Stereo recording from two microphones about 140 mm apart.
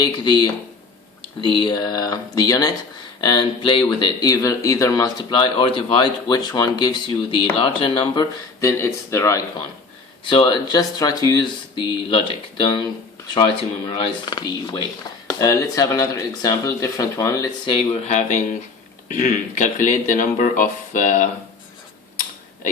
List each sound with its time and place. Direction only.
0.0 s speech: 30° left (ahead or behind)
8.8 s speech: 20° left (ahead or behind)
10.2 s speech: 35° left (ahead or behind)
17.7 s speech: 55° left (ahead or behind)